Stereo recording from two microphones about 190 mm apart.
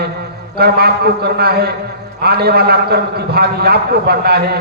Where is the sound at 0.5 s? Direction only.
55° right (ahead or behind).